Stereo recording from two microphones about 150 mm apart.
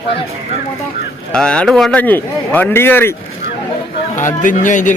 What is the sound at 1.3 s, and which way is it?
Speech, 5° left (ahead or behind).